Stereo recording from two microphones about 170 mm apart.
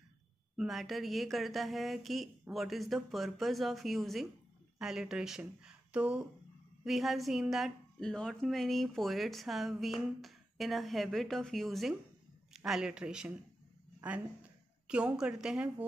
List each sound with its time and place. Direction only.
0.6 s a woman's voice: centre (ahead or behind)